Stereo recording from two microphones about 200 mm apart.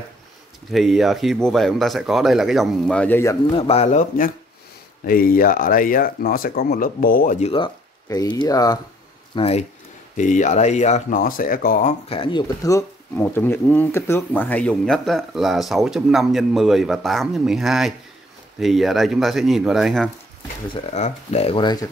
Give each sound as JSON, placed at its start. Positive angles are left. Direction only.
{"t": 0.7, "sound": "speech", "side_deg": 0}
{"t": 3.5, "sound": "speech", "side_deg": 30}
{"t": 9.3, "sound": "speech", "side_deg": 30}
{"t": 12.1, "sound": "speech", "side_deg": 25}
{"t": 20.7, "sound": "speech", "side_deg": 30}